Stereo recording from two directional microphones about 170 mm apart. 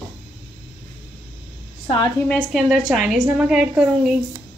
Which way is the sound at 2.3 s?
5° left (ahead or behind).